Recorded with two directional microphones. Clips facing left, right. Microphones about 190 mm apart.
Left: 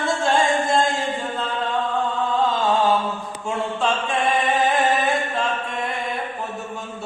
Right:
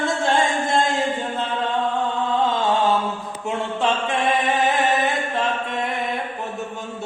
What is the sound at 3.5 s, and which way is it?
Mantra, 20° right (ahead or behind).